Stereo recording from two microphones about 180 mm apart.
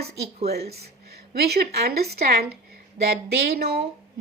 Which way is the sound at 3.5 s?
60° right (ahead or behind).